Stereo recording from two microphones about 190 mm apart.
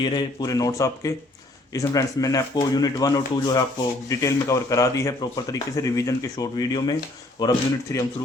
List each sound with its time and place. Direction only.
0.0 s speech: 20° left (ahead or behind)